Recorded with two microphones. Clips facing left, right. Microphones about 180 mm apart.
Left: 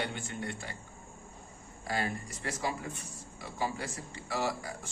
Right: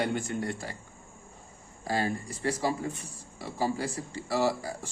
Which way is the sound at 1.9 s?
30° right (ahead or behind).